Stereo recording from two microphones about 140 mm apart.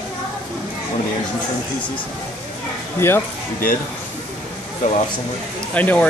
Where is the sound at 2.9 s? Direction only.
15° left (ahead or behind).